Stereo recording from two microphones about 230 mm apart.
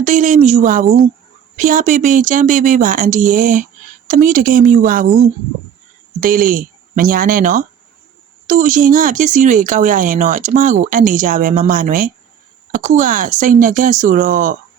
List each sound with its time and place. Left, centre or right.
0.0 s speech: right
6.2 s speech: right